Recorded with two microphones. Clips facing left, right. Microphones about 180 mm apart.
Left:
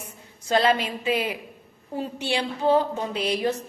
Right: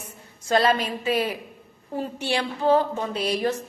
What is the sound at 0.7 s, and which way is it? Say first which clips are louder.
Speech: even; 10° left (ahead or behind).